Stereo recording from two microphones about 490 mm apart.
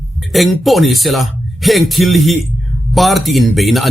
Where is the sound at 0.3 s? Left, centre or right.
Centre.